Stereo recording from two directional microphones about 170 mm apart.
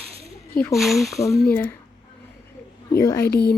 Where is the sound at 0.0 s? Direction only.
35° right (ahead or behind).